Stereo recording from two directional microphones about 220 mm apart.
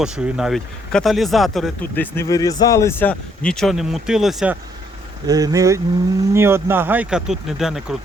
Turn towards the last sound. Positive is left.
turn(degrees=0)  # may be behind; listen again after turning